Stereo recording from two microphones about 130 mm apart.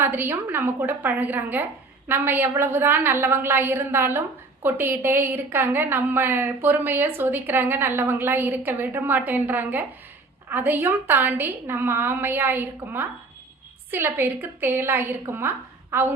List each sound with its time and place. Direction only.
0.0 s a woman's voice: 15° right (ahead or behind)